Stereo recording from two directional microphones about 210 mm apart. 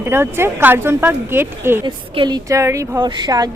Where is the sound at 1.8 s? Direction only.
25° right (ahead or behind).